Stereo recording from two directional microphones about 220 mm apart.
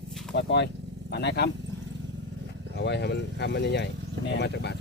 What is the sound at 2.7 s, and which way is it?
Speech, 50° left (ahead or behind).